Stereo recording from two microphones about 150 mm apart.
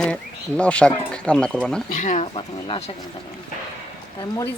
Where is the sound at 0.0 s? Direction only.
5° left (ahead or behind).